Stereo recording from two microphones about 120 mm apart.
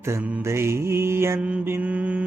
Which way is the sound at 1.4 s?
10° right (ahead or behind).